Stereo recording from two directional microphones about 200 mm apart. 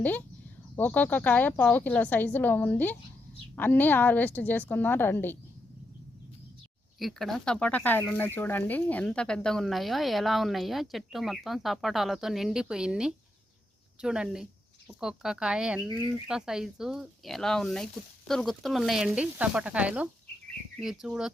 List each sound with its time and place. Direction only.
0.0 s a woman's voice: 10° left (ahead or behind)
7.0 s a woman's voice: centre (ahead or behind)